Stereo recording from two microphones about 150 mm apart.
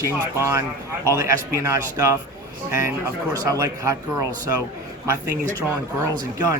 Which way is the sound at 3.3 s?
25° right (ahead or behind).